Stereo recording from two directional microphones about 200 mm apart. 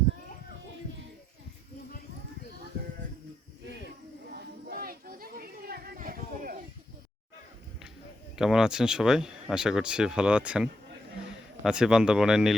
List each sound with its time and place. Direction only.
4.3 s chatter: 50° right (ahead or behind)
8.4 s speech: centre (ahead or behind)